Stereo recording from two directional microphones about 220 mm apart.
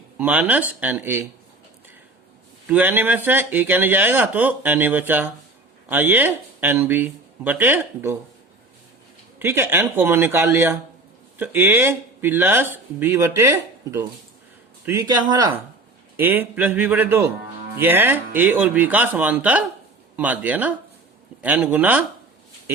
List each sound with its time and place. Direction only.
0.2 s speech: 10° right (ahead or behind)
2.6 s speech: 10° right (ahead or behind)
9.4 s speech: 10° right (ahead or behind)
16.1 s speech: 10° right (ahead or behind)